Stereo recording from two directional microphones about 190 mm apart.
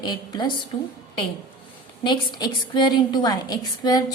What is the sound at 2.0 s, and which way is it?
A woman's voice, 25° left (ahead or behind).